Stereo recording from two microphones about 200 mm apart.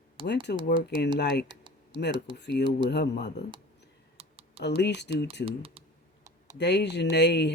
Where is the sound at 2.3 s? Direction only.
55° left (ahead or behind).